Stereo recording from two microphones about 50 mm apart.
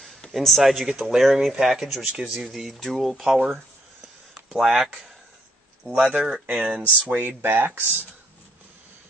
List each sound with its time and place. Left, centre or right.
0.3 s speech: centre
6.1 s speech: centre
7.1 s speech: right